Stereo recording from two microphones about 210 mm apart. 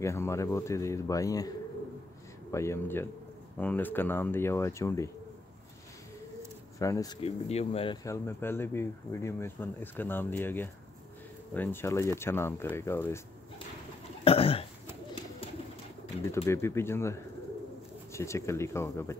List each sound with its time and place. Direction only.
0.0 s speech: 15° left (ahead or behind)
2.5 s speech: 15° left (ahead or behind)
6.8 s speech: 15° left (ahead or behind)
7.2 s speech: 30° left (ahead or behind); by 13.2 s 10° left (ahead or behind)
14.2 s burping: 25° left (ahead or behind)
16.4 s speech: 10° left (ahead or behind)